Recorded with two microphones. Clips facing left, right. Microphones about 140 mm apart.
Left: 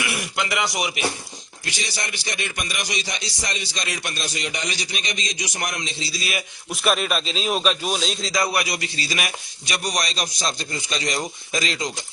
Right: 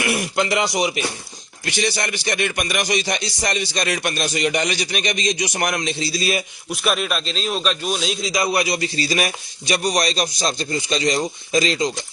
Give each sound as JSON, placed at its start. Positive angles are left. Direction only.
{"t": 0.0, "sound": "a man's voice", "side_deg": -40}
{"t": 1.7, "sound": "speech", "side_deg": -55}
{"t": 6.1, "sound": "a man's voice", "side_deg": -35}
{"t": 6.7, "sound": "a man's voice", "side_deg": 0}
{"t": 8.3, "sound": "a man's voice", "side_deg": -20}